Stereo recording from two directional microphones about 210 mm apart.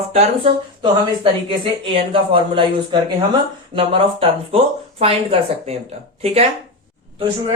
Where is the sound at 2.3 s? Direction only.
25° right (ahead or behind).